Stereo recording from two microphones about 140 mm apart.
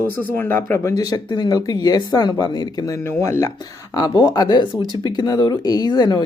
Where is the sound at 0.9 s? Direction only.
30° left (ahead or behind).